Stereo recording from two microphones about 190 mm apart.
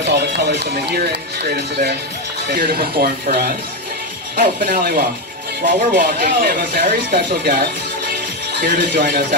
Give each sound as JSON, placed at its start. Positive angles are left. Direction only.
{"t": 0.1, "sound": "speech", "side_deg": -60}